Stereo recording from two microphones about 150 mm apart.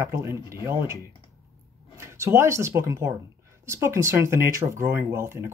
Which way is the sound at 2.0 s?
15° right (ahead or behind).